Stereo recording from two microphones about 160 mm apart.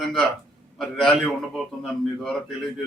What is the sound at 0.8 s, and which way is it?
A man's voice, 5° left (ahead or behind).